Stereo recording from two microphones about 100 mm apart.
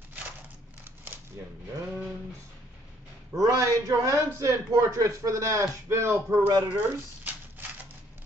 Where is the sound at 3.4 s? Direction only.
35° right (ahead or behind).